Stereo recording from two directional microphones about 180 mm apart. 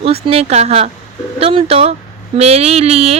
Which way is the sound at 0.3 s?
35° right (ahead or behind).